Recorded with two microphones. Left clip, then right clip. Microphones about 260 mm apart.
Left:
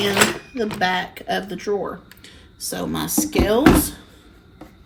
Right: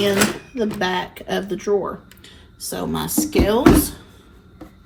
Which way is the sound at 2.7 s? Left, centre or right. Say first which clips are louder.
Right 1 dB; centre.